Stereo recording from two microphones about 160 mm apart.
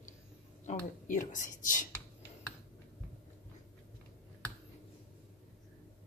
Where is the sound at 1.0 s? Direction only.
55° left (ahead or behind).